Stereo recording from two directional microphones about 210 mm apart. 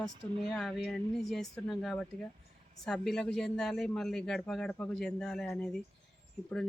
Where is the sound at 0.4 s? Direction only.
Centre (ahead or behind).